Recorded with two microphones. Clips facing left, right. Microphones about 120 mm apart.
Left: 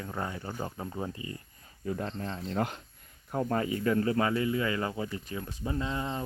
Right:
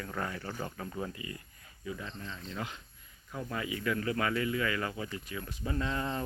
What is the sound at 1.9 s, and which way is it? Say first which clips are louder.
Speech: left 7 dB; 50° left (ahead or behind).